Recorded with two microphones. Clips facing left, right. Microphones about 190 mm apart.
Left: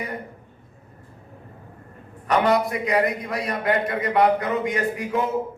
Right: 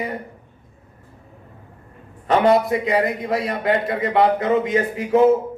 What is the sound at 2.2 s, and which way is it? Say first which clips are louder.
A man's voice: right 4 dB; 25° right (ahead or behind).